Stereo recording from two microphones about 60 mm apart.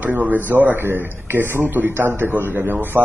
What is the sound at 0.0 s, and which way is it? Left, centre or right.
Speech, right.